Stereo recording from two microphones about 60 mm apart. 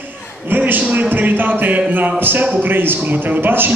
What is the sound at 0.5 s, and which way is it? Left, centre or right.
A man's voice, right.